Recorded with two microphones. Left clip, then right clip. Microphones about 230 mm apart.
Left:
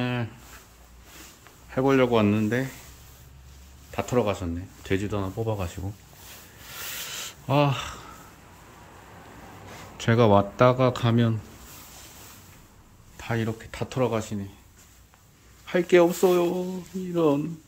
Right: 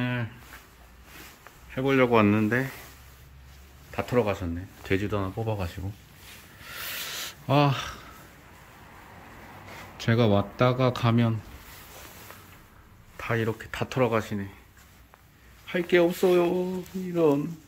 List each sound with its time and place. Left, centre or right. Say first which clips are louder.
0.0 s a sound: left 1 dB; centre
1.7 s speech: left 1 dB; centre
3.9 s speech: left 1 dB; centre
7.4 s speech: even; centre
10.0 s speech: left 5 dB; centre
13.2 s speech: right 2 dB; centre
15.6 s speech: left 3 dB; centre